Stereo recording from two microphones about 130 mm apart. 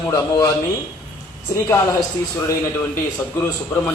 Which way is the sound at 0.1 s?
25° left (ahead or behind).